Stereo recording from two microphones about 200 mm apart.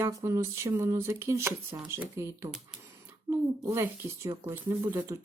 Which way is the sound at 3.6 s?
15° right (ahead or behind).